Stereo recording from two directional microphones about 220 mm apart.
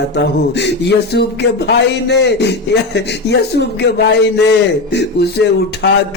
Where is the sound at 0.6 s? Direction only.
50° left (ahead or behind).